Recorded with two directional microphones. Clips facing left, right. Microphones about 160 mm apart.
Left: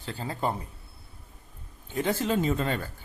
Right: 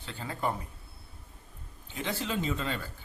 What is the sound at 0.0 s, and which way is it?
Speech, 35° left (ahead or behind).